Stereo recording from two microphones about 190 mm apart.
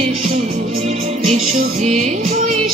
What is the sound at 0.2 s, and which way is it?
Music, 35° right (ahead or behind).